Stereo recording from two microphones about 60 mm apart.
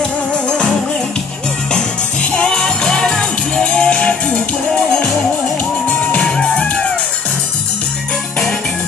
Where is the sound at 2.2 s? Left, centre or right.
Left.